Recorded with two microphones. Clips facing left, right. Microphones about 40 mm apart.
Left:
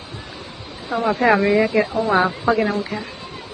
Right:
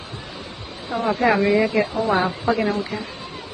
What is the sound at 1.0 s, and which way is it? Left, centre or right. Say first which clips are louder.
Speech: left 2 dB; left.